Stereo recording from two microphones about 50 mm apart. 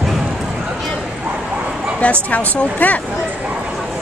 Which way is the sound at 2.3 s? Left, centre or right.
Left.